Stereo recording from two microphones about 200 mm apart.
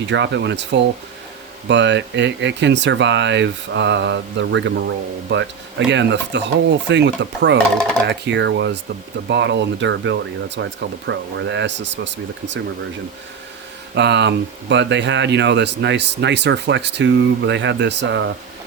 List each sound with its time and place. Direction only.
0.0 s speech: 60° right (ahead or behind)
13.9 s speech: 60° right (ahead or behind)